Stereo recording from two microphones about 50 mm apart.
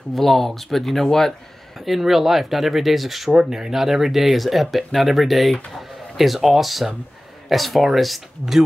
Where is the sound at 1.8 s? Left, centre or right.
Centre.